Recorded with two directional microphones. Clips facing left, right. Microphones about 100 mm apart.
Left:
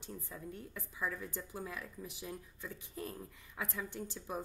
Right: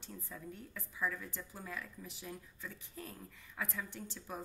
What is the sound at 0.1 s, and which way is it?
A woman's voice, 20° left (ahead or behind).